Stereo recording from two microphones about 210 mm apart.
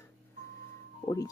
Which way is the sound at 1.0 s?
15° left (ahead or behind).